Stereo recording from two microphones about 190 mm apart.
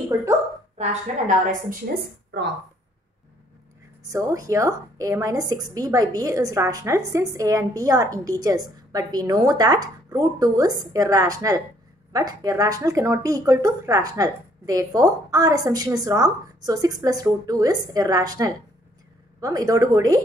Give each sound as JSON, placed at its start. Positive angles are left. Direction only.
{"t": 0.7, "sound": "a woman's voice", "side_deg": -40}
{"t": 4.0, "sound": "a woman's voice", "side_deg": -15}